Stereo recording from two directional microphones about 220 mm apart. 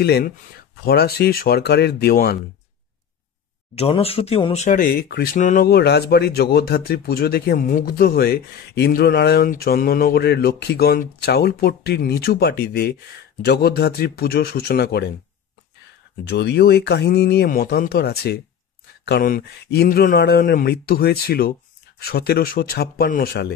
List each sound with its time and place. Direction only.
0.0 s speech: 45° left (ahead or behind)
3.7 s speech: 25° left (ahead or behind); by 15.0 s 45° left (ahead or behind)
16.3 s speech: 50° left (ahead or behind)